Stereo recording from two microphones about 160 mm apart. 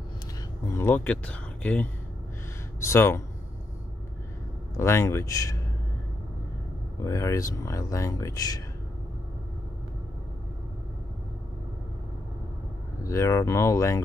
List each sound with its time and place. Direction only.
0.7 s speech: 15° left (ahead or behind)
4.7 s speech: 15° left (ahead or behind)
7.0 s speech: 20° left (ahead or behind)
13.0 s speech: 20° left (ahead or behind)